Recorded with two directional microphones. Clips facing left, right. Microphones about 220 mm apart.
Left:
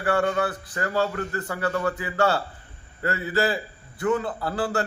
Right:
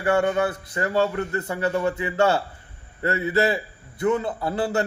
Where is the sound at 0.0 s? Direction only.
20° right (ahead or behind).